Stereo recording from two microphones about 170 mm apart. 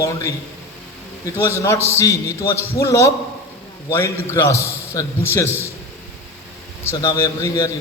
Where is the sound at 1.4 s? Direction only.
15° left (ahead or behind).